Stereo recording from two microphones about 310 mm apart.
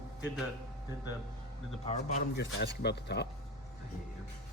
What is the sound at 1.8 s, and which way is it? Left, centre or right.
Speech, left.